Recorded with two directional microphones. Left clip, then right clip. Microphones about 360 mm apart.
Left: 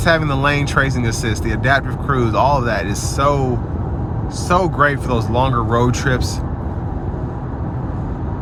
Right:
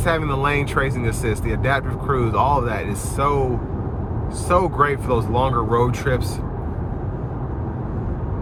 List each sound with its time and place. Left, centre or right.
0.0 s speech: centre
4.4 s speech: centre